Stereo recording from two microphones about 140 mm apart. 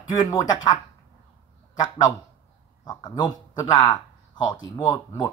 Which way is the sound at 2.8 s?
30° left (ahead or behind).